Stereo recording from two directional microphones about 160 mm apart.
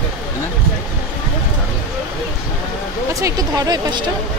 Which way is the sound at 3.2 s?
25° right (ahead or behind).